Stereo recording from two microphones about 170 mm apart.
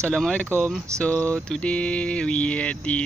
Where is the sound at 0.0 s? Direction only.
5° left (ahead or behind).